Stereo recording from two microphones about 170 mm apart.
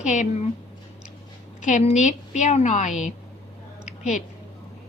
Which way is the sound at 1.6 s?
45° left (ahead or behind).